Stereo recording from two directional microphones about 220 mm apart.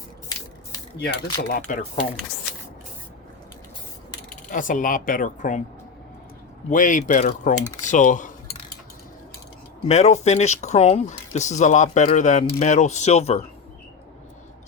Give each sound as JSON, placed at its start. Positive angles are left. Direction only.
{"t": 0.9, "sound": "speech", "side_deg": 45}
{"t": 4.3, "sound": "speech", "side_deg": 35}
{"t": 6.7, "sound": "speech", "side_deg": 35}
{"t": 9.8, "sound": "speech", "side_deg": 30}